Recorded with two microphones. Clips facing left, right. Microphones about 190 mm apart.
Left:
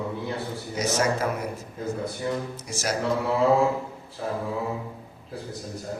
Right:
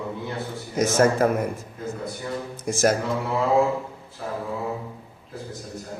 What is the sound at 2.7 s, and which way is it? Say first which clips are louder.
Speech: right 12 dB; 50° right (ahead or behind).